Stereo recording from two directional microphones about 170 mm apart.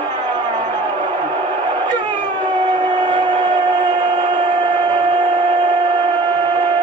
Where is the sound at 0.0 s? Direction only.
25° right (ahead or behind).